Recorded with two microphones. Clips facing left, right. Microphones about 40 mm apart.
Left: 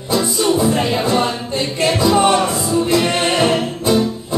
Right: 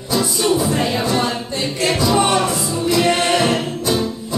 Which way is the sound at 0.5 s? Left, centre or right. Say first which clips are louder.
Left 2 dB; centre.